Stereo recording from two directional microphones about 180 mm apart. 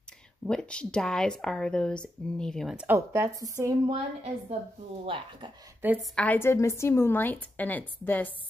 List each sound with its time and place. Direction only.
0.5 s speech: 5° left (ahead or behind); by 3.7 s 20° right (ahead or behind)
3.9 s a woman's voice: 35° right (ahead or behind)
5.8 s a woman's voice: 10° right (ahead or behind)
6.1 s a woman's voice: 10° left (ahead or behind)